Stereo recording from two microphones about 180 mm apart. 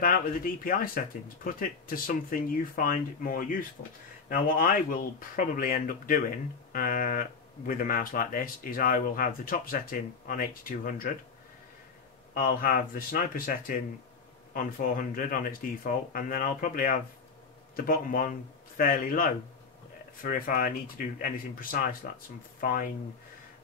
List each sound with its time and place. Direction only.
0.0 s speech: 50° left (ahead or behind)
12.4 s speech: 55° left (ahead or behind)
14.5 s speech: 50° left (ahead or behind)